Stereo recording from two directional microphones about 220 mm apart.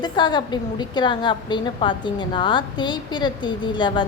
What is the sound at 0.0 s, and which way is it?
A woman's voice, 20° left (ahead or behind).